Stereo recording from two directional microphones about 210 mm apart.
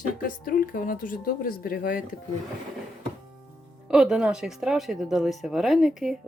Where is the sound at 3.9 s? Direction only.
5° right (ahead or behind).